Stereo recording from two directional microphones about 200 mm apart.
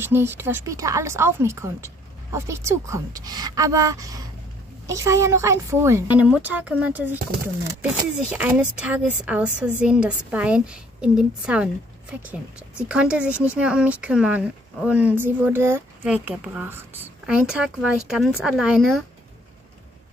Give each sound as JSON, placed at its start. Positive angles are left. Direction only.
{"t": 0.0, "sound": "a woman's voice", "side_deg": -10}
{"t": 8.3, "sound": "speech", "side_deg": -5}